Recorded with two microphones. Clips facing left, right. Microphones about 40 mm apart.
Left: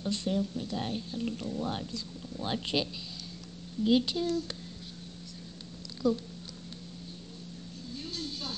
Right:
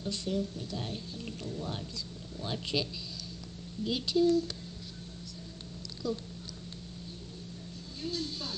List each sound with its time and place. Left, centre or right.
0.0 s speech: left
0.3 s speech: centre
6.0 s speech: left
8.1 s speech: left